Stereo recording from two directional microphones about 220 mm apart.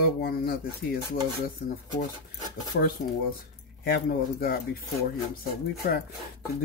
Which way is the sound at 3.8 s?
45° left (ahead or behind).